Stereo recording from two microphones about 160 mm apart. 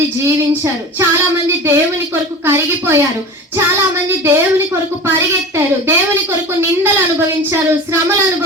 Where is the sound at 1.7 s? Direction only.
15° right (ahead or behind).